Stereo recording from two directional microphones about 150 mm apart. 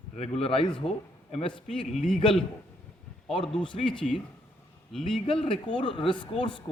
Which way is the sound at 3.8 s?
5° left (ahead or behind).